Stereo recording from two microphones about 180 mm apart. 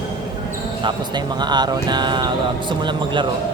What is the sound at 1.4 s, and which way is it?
Speech, 25° right (ahead or behind).